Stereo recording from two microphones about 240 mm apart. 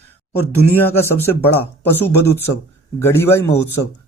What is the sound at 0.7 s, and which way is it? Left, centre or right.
Speech, centre.